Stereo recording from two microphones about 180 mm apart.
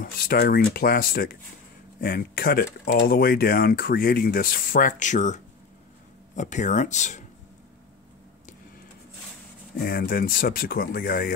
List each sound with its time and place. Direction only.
0.0 s speech: 50° left (ahead or behind)
9.8 s speech: 55° left (ahead or behind)